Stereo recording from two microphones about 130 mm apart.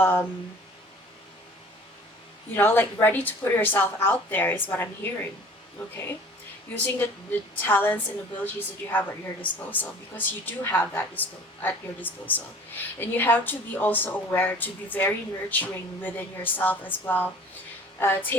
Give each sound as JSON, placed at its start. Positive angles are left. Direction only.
{"t": 0.0, "sound": "a woman's voice", "side_deg": 15}
{"t": 2.6, "sound": "a woman's voice", "side_deg": 15}